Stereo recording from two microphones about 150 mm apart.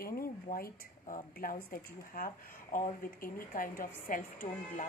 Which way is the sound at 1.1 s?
65° left (ahead or behind).